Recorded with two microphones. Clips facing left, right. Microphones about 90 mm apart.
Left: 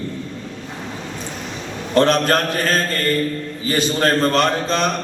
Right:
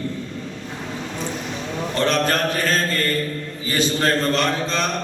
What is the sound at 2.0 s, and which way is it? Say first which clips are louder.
Mantra: left 5 dB; 45° left (ahead or behind).